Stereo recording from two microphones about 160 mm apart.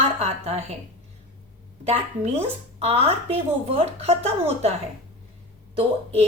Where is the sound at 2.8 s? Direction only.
40° right (ahead or behind).